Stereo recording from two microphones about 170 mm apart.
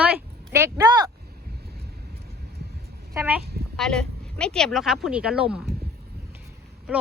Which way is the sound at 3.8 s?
5° left (ahead or behind).